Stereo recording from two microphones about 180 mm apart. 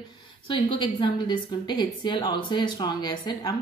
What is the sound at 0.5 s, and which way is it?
A woman's voice, 25° left (ahead or behind).